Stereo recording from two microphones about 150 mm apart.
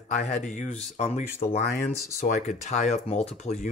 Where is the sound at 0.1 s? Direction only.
55° left (ahead or behind).